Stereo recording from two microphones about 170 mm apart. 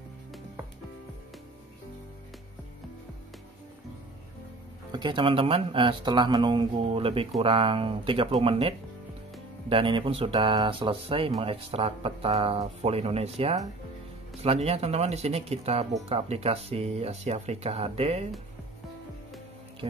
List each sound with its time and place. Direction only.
4.9 s speech: 25° right (ahead or behind)
19.8 s music: 30° right (ahead or behind)